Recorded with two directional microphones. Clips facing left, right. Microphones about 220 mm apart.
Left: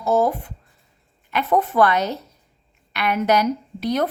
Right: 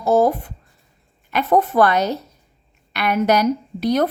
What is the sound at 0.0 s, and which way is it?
A woman's voice, 40° right (ahead or behind).